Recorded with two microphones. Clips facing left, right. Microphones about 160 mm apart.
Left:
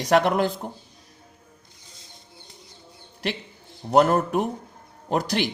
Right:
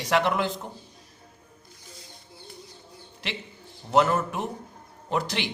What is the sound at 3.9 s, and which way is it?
A man's voice, 40° left (ahead or behind).